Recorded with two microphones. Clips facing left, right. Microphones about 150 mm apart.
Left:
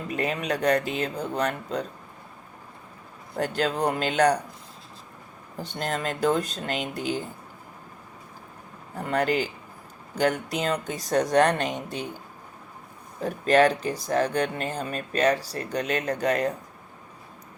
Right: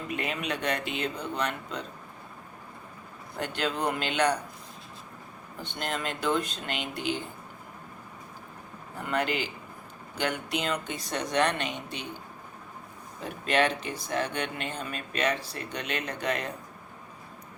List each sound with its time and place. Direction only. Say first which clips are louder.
0.1 s speech: left 5 dB; 40° left (ahead or behind)
3.3 s speech: left 5 dB; 40° left (ahead or behind)
5.5 s speech: left 4 dB; 40° left (ahead or behind)
9.0 s speech: left 5 dB; 40° left (ahead or behind)